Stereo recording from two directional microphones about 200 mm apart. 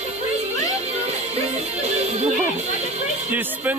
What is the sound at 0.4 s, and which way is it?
Music, 35° right (ahead or behind).